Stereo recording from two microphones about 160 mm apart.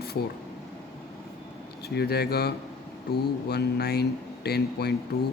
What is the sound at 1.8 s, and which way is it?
Speech, 85° left.